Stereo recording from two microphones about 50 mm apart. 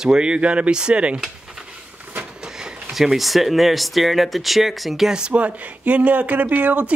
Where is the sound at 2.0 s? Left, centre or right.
Right.